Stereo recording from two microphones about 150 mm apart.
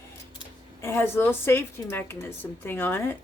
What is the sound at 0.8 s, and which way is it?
Speech, 15° left (ahead or behind).